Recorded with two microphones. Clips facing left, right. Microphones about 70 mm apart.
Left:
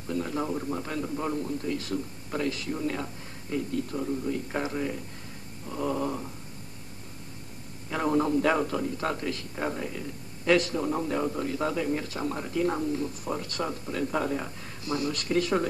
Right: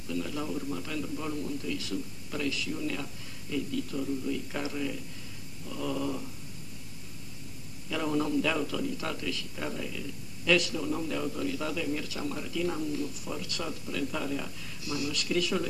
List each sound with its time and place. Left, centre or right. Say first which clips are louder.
0.1 s a man's voice: left 4 dB; left
7.9 s a man's voice: left 4 dB; left